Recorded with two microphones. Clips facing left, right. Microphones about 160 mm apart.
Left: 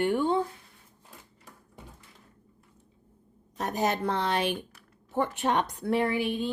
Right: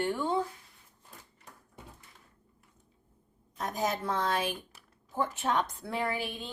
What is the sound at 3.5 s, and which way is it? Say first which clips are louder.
A woman's voice: left 4 dB; 70° left (ahead or behind).